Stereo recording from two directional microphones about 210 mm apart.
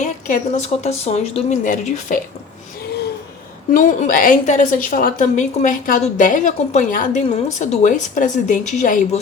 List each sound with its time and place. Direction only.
0.0 s a woman's voice: 35° left (ahead or behind)
3.7 s a woman's voice: 40° left (ahead or behind)